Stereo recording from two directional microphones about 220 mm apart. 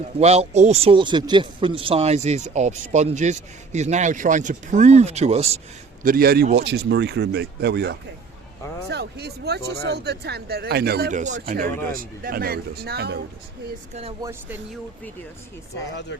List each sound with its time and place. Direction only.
0.2 s speech: 30° right (ahead or behind)
6.0 s speech: 40° right (ahead or behind)
11.2 s speech: 35° right (ahead or behind)
14.2 s speech: 15° right (ahead or behind)